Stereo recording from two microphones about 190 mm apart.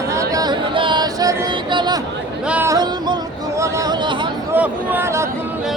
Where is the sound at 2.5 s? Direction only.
10° right (ahead or behind).